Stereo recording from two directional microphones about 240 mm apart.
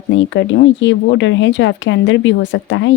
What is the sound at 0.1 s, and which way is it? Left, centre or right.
Speech, left.